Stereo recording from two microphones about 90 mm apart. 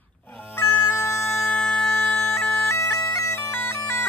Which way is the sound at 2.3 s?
30° left (ahead or behind).